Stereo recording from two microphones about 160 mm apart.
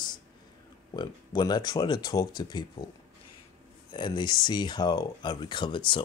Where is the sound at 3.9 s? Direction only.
30° left (ahead or behind).